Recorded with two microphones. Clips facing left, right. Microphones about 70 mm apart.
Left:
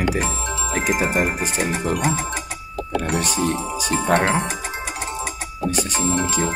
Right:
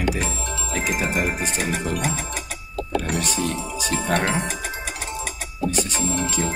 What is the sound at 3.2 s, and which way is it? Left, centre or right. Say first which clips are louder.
Speech: left 3 dB; left.